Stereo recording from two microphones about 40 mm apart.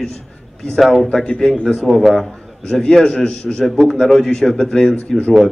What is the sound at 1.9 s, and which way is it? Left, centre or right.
Speech, centre.